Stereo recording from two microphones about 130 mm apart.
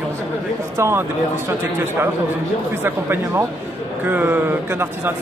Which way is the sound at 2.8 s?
15° right (ahead or behind).